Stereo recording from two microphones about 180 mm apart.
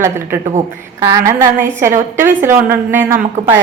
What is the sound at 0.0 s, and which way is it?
Speech, 15° right (ahead or behind).